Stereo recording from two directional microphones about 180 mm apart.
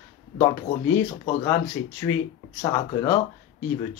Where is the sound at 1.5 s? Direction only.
15° left (ahead or behind).